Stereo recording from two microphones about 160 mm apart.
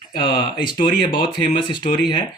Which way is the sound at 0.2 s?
30° left (ahead or behind).